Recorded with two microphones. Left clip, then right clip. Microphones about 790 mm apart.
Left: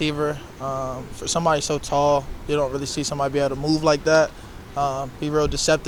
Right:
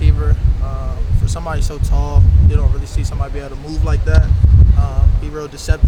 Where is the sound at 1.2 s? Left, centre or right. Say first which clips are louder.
Left 6 dB; left.